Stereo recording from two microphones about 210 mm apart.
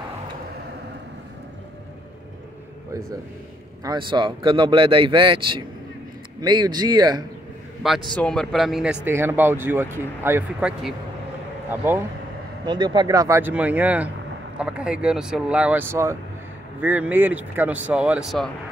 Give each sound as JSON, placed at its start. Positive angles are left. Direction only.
{"t": 3.8, "sound": "speech", "side_deg": -20}
{"t": 7.8, "sound": "speech", "side_deg": 0}
{"t": 12.6, "sound": "speech", "side_deg": -20}